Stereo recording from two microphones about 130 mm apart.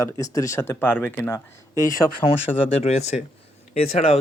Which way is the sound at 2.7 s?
55° left (ahead or behind).